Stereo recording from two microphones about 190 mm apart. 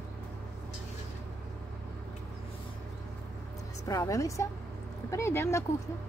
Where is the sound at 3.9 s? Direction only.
15° left (ahead or behind).